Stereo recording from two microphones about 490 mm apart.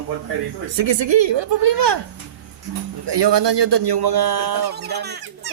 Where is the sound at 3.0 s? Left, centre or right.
Right.